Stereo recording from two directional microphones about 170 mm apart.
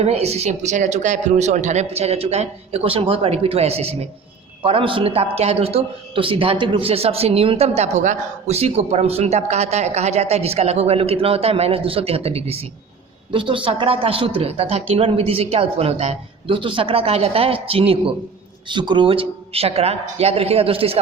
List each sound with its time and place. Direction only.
0.0 s a man's voice: 40° right (ahead or behind)